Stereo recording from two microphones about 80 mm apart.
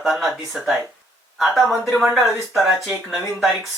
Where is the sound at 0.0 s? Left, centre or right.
Centre.